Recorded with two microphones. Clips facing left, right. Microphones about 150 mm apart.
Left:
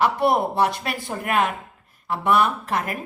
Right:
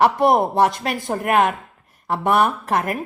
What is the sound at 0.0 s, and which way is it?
A woman's voice, 50° right (ahead or behind).